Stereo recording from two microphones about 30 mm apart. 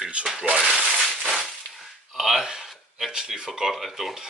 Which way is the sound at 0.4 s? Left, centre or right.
Right.